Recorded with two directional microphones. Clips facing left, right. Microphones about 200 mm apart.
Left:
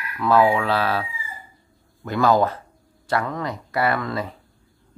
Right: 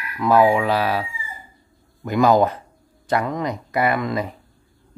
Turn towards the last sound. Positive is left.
turn(degrees=-15)  # may be behind; listen again after turning